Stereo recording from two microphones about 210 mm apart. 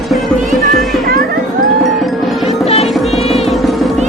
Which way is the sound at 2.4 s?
30° left (ahead or behind).